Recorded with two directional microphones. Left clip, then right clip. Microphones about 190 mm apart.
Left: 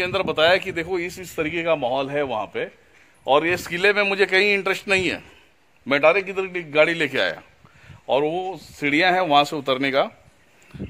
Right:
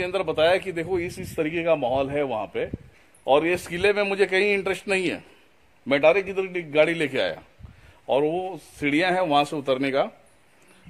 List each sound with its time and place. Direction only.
0.0 s a man's voice: 15° left (ahead or behind)